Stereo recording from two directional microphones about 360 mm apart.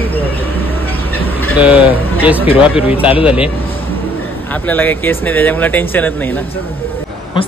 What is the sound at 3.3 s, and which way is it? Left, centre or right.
Speech, centre.